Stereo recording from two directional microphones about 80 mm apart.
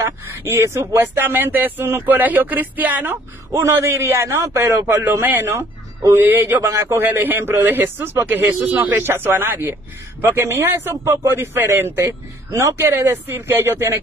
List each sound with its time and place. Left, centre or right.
0.0 s speech: right